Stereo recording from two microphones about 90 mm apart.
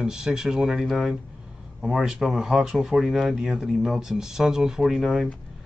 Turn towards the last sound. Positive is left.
turn(degrees=-5)  # may be behind; listen again after turning